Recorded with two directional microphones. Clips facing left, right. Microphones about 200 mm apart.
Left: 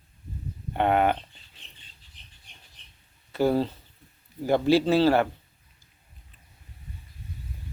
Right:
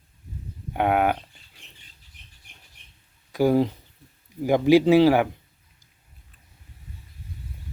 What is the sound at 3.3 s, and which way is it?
Speech, 10° right (ahead or behind).